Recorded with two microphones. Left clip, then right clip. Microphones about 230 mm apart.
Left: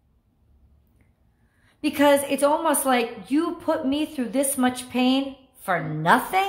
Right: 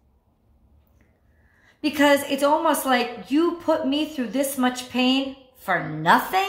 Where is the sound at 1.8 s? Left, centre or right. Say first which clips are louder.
Even; centre.